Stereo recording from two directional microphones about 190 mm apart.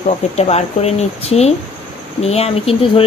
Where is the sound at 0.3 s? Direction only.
35° left (ahead or behind).